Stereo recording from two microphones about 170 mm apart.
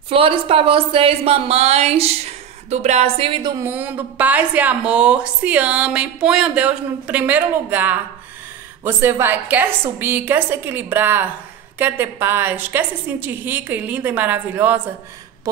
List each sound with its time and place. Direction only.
0.1 s a woman's voice: 30° right (ahead or behind)
3.6 s a woman's voice: 10° right (ahead or behind)